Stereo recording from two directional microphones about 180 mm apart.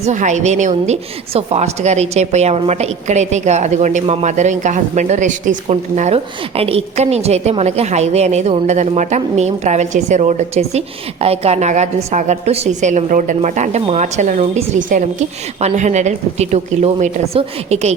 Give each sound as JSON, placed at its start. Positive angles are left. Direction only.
{"t": 0.0, "sound": "a woman's voice", "side_deg": -40}